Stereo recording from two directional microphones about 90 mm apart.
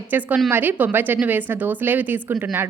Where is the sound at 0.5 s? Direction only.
20° right (ahead or behind).